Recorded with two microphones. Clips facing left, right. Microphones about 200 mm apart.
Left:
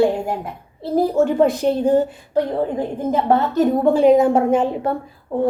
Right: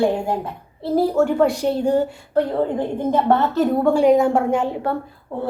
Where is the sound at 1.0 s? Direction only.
20° left (ahead or behind).